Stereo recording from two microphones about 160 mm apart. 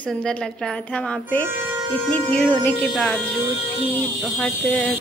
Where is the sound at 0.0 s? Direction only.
5° left (ahead or behind).